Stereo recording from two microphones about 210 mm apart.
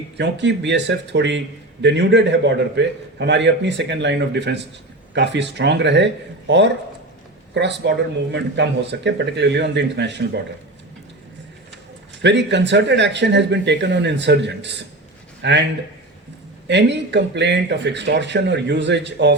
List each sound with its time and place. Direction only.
0.2 s speech: 55° right (ahead or behind)
7.5 s speech: 55° right (ahead or behind)
12.2 s a man's voice: 55° right (ahead or behind)
16.6 s speech: 55° right (ahead or behind)